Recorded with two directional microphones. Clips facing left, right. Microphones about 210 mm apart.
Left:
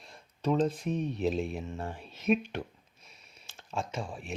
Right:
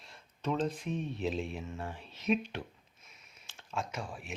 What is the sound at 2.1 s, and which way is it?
Speech, 50° left (ahead or behind).